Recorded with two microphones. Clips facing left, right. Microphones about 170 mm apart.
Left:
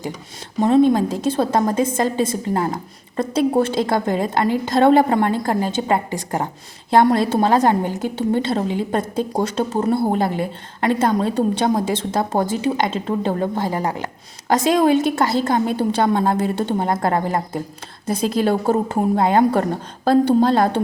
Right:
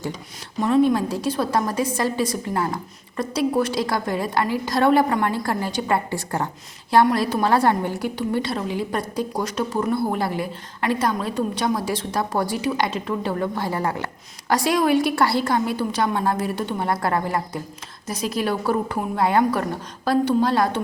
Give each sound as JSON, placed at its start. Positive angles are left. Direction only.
{"t": 0.6, "sound": "a woman's voice", "side_deg": 25}